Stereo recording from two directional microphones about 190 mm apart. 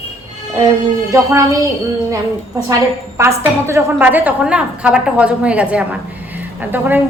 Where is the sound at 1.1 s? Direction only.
15° right (ahead or behind).